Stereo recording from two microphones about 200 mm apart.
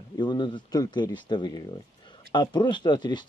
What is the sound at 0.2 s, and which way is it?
Speech, 20° left (ahead or behind).